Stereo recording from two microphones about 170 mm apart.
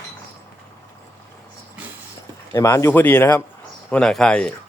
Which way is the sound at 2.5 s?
20° left (ahead or behind).